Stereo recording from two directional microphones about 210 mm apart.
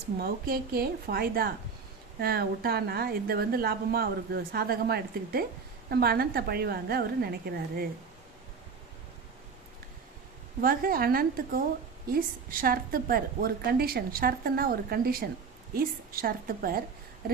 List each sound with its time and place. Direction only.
0.2 s a woman's voice: 45° right (ahead or behind)
10.6 s a woman's voice: 45° right (ahead or behind)